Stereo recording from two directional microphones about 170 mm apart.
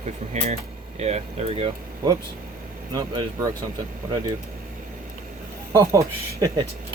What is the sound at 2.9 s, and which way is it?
Speech, 20° right (ahead or behind).